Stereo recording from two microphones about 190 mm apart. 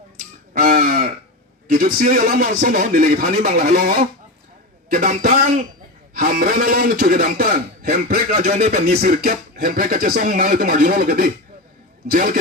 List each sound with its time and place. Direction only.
0.5 s caw: 45° right (ahead or behind)
1.6 s a man's voice: 50° right (ahead or behind)